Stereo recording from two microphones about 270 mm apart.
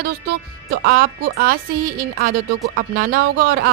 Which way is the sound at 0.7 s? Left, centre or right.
Right.